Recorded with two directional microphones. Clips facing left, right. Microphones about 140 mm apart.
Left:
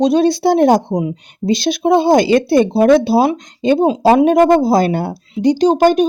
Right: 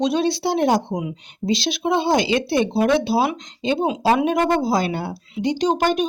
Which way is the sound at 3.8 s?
35° left (ahead or behind).